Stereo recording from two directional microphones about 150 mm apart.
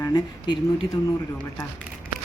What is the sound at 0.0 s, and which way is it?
Speech, 30° left (ahead or behind).